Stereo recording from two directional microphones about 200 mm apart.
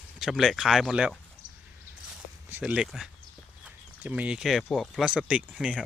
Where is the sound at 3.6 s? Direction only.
5° right (ahead or behind).